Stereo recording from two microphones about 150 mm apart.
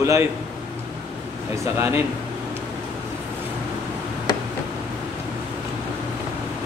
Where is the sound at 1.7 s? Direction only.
15° right (ahead or behind).